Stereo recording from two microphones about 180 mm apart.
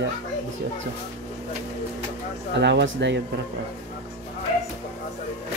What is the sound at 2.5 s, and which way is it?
Speech, 75° right (ahead or behind).